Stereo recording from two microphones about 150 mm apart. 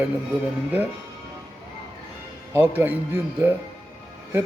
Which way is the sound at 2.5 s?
15° right (ahead or behind).